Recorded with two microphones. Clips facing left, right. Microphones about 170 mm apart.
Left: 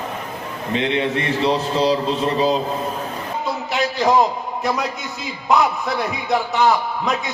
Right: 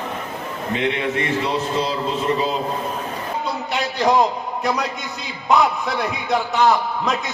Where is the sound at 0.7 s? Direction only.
30° left (ahead or behind).